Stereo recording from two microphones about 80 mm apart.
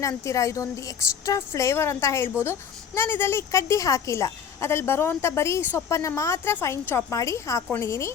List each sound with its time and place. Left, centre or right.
0.3 s a woman's voice: left